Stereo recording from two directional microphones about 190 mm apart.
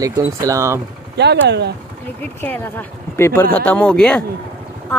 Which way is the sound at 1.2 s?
60° right (ahead or behind).